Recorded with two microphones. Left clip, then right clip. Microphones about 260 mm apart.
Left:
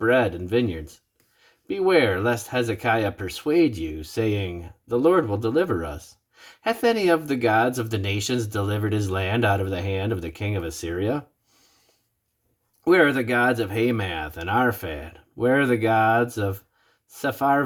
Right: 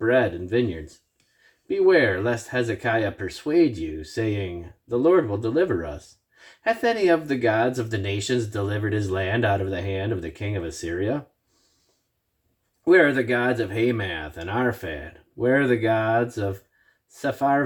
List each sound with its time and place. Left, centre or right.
0.0 s speech: left
12.8 s speech: left